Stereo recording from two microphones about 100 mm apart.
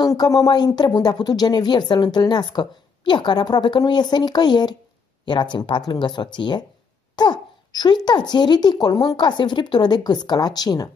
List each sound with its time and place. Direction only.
0.0 s speech: 40° left (ahead or behind)